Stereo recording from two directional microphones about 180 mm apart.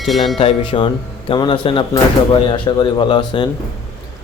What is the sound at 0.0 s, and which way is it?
Speech, centre (ahead or behind).